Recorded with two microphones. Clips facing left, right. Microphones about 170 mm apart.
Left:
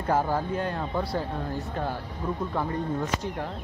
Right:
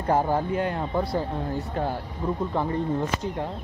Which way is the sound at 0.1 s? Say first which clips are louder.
Right 3 dB; 20° right (ahead or behind).